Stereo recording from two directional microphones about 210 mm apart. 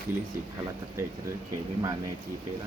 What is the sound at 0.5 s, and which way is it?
Speech, 15° right (ahead or behind).